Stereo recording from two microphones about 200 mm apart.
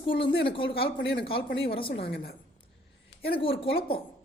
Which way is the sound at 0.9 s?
55° left (ahead or behind).